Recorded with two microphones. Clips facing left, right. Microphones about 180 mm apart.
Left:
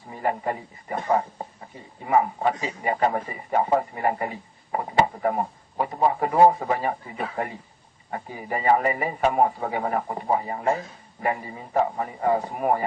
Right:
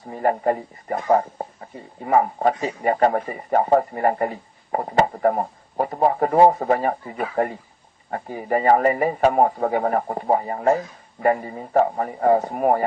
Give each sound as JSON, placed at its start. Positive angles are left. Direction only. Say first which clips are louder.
{"t": 0.1, "sound": "a man's voice", "louder": "right 6 dB", "side_deg": -45}
{"t": 2.0, "sound": "a man's voice", "louder": "right 3 dB", "side_deg": -45}